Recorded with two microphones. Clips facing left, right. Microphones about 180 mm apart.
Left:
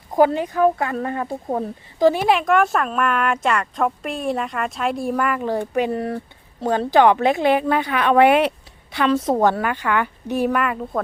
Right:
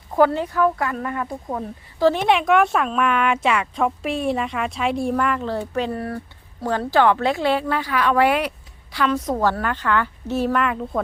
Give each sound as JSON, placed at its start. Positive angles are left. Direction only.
{"t": 0.1, "sound": "a woman's voice", "side_deg": 15}
{"t": 2.0, "sound": "speech", "side_deg": 15}
{"t": 2.2, "sound": "a woman's voice", "side_deg": 0}